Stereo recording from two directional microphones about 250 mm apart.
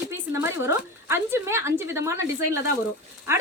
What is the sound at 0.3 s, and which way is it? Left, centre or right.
A woman's voice, centre.